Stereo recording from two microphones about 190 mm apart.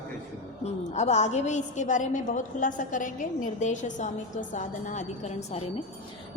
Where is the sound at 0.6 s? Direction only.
35° left (ahead or behind).